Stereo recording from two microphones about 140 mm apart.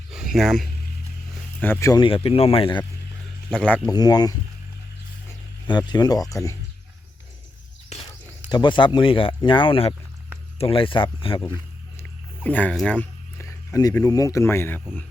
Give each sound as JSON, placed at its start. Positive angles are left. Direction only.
{"t": 0.1, "sound": "a sound", "side_deg": 0}
{"t": 1.6, "sound": "speech", "side_deg": 15}
{"t": 1.9, "sound": "speech", "side_deg": 35}
{"t": 3.5, "sound": "speech", "side_deg": 5}
{"t": 3.8, "sound": "speech", "side_deg": 30}
{"t": 5.6, "sound": "speech", "side_deg": 30}
{"t": 8.4, "sound": "speech", "side_deg": 30}
{"t": 12.4, "sound": "speech", "side_deg": 10}
{"t": 13.4, "sound": "a sound", "side_deg": 20}
{"t": 14.0, "sound": "speech", "side_deg": 25}